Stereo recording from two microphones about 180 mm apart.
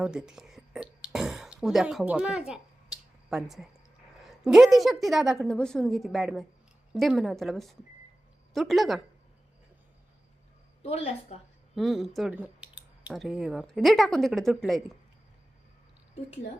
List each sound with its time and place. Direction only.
0.0 s a sound: 5° right (ahead or behind)
4.2 s speech: centre (ahead or behind)
10.8 s a woman's voice: 35° left (ahead or behind)
11.7 s speech: centre (ahead or behind)
16.1 s a woman's voice: 35° left (ahead or behind)